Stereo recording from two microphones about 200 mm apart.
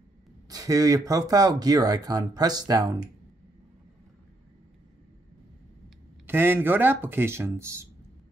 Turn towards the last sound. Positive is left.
turn(degrees=-15)  # may be behind; listen again after turning